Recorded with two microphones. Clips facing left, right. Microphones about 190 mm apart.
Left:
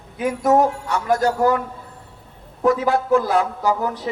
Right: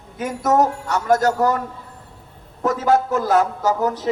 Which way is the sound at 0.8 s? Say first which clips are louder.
Right 2 dB; 45° right (ahead or behind).